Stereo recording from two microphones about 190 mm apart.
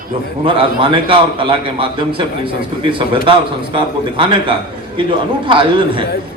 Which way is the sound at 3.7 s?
25° right (ahead or behind).